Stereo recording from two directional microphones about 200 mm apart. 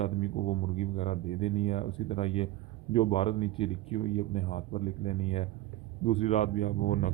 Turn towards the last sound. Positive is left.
turn(degrees=45)  # may be behind; listen again after turning